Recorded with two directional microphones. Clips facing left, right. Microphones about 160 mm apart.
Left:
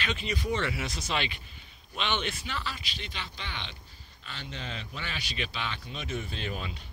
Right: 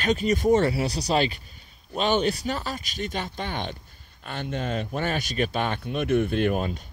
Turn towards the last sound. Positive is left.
turn(degrees=-50)  # may be behind; listen again after turning